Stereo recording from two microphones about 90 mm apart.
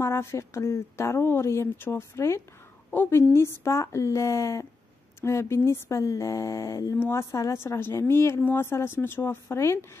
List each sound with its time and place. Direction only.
0.0 s a woman's voice: 30° left (ahead or behind)